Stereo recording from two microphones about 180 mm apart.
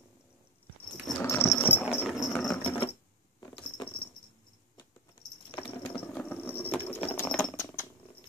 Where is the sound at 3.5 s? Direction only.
30° left (ahead or behind).